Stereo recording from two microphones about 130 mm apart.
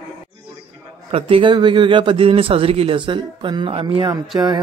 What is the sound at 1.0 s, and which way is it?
Speech, 50° right (ahead or behind).